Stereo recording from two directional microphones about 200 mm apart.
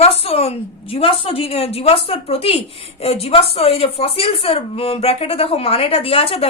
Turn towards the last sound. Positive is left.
turn(degrees=30)  # may be behind; listen again after turning